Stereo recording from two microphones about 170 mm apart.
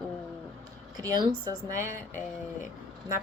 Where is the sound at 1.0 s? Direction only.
20° right (ahead or behind).